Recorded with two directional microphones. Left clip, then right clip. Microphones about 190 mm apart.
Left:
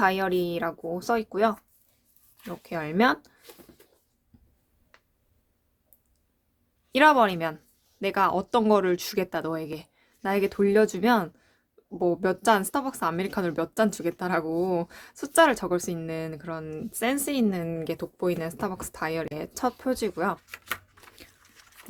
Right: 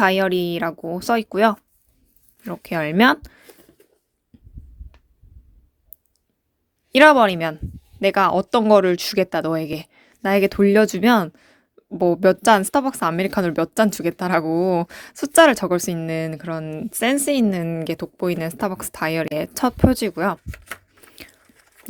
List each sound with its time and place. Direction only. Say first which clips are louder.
0.0 s speech: right 6 dB; 40° right (ahead or behind)
6.9 s speech: right 7 dB; 30° right (ahead or behind)
20.5 s a sound: left 1 dB; 5° right (ahead or behind)
21.4 s chewing: even; 10° right (ahead or behind)